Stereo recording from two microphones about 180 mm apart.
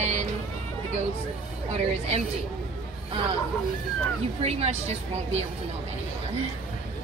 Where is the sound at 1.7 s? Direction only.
35° right (ahead or behind).